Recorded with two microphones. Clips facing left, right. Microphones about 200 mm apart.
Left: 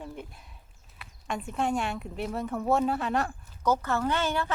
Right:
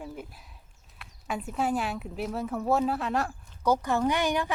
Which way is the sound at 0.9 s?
5° right (ahead or behind).